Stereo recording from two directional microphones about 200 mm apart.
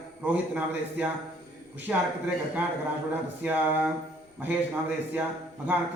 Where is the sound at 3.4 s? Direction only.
10° right (ahead or behind).